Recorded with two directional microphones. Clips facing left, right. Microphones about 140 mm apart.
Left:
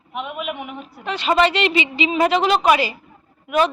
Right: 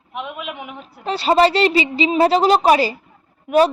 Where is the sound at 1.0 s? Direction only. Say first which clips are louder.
Right 3 dB; 35° right (ahead or behind).